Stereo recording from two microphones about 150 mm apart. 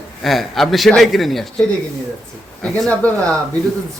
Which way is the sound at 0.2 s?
Centre (ahead or behind).